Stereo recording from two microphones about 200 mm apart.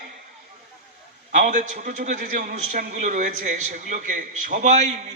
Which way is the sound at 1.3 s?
35° right (ahead or behind).